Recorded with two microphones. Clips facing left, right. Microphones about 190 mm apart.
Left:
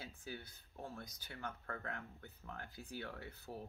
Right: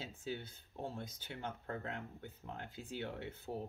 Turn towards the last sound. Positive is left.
turn(degrees=-25)  # may be behind; listen again after turning